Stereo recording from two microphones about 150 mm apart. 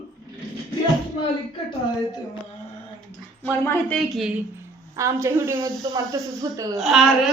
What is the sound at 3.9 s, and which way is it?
Speech, centre (ahead or behind).